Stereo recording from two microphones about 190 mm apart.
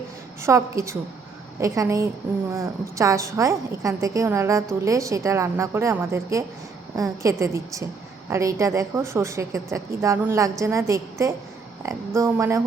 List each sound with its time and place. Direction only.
0.4 s a woman's voice: 15° right (ahead or behind)